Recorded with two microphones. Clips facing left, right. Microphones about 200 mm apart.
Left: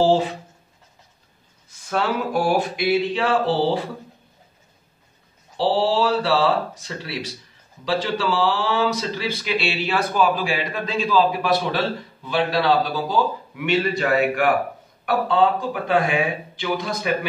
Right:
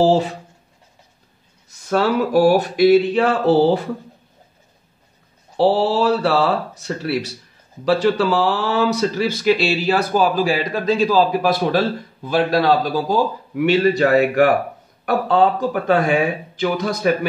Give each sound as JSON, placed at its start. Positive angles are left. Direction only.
{"t": 1.7, "sound": "speech", "side_deg": -40}
{"t": 5.6, "sound": "speech", "side_deg": -45}
{"t": 7.8, "sound": "speech", "side_deg": -50}